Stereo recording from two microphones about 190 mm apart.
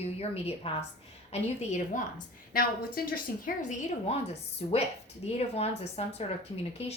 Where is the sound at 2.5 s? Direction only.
50° left (ahead or behind).